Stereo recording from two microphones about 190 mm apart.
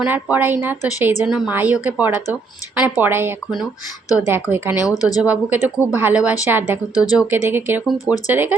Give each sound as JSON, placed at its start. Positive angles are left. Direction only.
{"t": 0.0, "sound": "a woman's voice", "side_deg": -5}
{"t": 4.9, "sound": "speech", "side_deg": 20}
{"t": 5.2, "sound": "a woman's voice", "side_deg": -10}
{"t": 6.9, "sound": "speech", "side_deg": 20}
{"t": 7.2, "sound": "a woman's voice", "side_deg": -10}
{"t": 7.9, "sound": "speech", "side_deg": 20}
{"t": 8.3, "sound": "a woman's voice", "side_deg": -10}